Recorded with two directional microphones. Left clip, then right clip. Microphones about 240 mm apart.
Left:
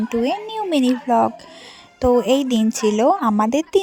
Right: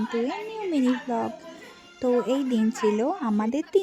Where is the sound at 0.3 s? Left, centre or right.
Left.